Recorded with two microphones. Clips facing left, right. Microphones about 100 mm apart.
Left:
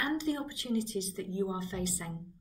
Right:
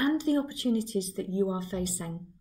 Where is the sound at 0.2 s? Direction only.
35° right (ahead or behind).